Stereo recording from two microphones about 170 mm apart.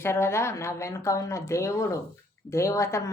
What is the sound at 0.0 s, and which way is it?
Speech, 15° left (ahead or behind).